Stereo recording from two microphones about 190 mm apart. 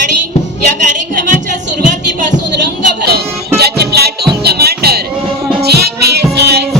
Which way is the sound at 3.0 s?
55° right (ahead or behind).